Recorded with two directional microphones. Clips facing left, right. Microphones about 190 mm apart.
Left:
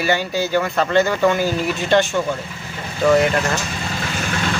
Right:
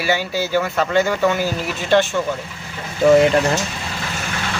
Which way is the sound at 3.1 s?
25° right (ahead or behind).